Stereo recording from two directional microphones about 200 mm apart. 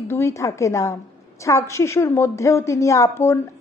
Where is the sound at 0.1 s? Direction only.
15° left (ahead or behind).